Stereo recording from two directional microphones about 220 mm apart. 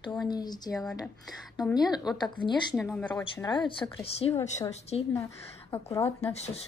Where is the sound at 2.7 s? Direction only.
Centre (ahead or behind).